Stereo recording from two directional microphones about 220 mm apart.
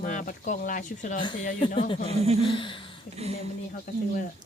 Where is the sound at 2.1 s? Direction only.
30° right (ahead or behind).